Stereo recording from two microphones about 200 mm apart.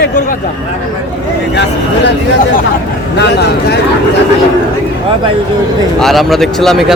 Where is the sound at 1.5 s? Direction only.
60° left (ahead or behind).